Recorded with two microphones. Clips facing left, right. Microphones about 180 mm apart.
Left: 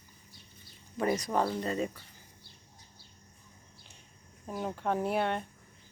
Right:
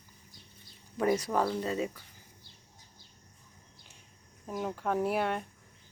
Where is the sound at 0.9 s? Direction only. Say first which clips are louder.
Right 1 dB; 5° right (ahead or behind).